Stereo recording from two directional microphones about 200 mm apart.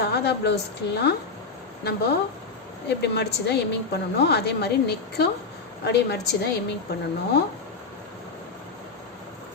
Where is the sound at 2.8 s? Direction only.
55° left (ahead or behind).